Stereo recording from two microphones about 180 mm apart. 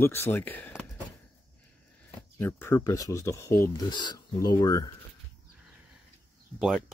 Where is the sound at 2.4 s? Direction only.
10° left (ahead or behind).